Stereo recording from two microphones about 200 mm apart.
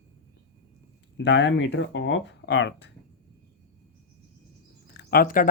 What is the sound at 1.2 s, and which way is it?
Speech, 60° left (ahead or behind).